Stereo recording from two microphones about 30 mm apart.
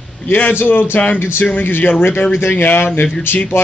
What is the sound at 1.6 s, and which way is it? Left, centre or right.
Speech, left.